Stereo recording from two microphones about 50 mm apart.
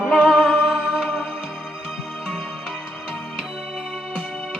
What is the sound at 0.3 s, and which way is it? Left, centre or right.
Music, centre.